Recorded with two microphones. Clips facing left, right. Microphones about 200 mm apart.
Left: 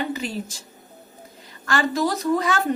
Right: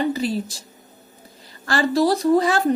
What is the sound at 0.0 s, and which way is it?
Speech, 35° right (ahead or behind).